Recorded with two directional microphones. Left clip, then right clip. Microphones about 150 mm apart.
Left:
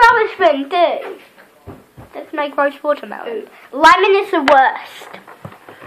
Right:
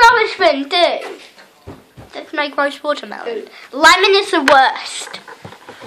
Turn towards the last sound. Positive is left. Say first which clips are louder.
# even
turn(degrees=-5)  # may be behind; listen again after turning